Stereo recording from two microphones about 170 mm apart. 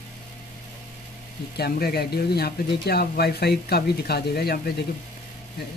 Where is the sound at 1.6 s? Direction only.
65° left (ahead or behind).